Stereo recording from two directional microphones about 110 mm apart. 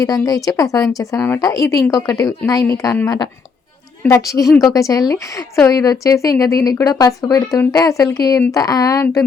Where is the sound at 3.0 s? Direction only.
40° left (ahead or behind).